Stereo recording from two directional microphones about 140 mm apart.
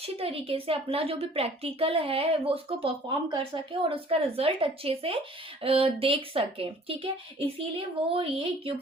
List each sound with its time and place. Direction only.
0.0 s a woman's voice: 45° right (ahead or behind)